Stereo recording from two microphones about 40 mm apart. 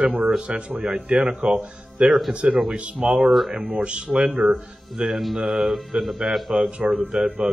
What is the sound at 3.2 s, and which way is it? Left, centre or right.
Speech, centre.